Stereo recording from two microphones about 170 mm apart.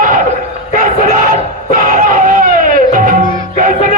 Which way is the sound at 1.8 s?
55° right (ahead or behind).